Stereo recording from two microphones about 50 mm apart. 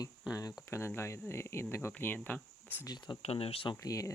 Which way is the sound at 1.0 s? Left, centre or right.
Left.